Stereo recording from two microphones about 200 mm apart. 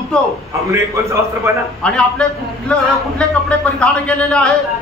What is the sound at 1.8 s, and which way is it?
A man's voice, 5° left (ahead or behind).